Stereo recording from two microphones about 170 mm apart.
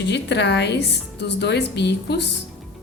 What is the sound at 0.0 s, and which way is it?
A woman's voice, 85° left.